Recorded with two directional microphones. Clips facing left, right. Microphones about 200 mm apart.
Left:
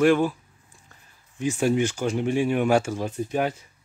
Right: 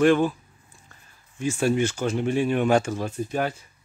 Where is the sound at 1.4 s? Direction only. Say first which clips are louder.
Even; 15° left (ahead or behind).